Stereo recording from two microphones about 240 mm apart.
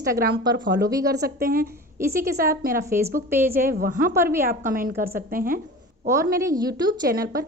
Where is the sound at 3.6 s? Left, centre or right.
Right.